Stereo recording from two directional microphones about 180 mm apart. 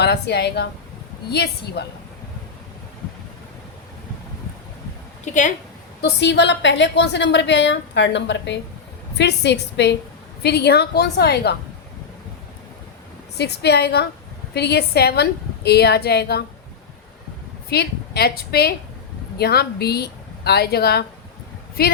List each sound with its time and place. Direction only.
0.0 s a woman's voice: 65° left (ahead or behind)
5.2 s a woman's voice: 45° left (ahead or behind)
6.0 s a woman's voice: 65° left (ahead or behind)
13.4 s a woman's voice: 70° left (ahead or behind)
17.7 s a woman's voice: 65° left (ahead or behind)